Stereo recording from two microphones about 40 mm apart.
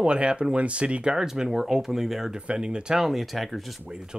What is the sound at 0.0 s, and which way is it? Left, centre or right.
Speech, right.